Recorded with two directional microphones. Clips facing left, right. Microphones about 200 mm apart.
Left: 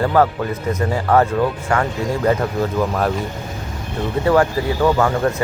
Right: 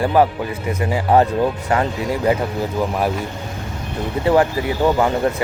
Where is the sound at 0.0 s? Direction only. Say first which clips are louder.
Even; 15° right (ahead or behind).